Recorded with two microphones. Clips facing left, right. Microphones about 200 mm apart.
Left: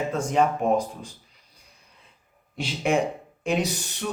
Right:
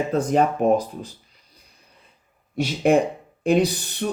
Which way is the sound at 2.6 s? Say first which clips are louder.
Right 6 dB; 45° right (ahead or behind).